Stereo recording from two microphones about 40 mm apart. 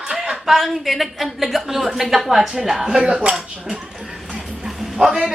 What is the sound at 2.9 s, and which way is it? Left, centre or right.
Speech, right.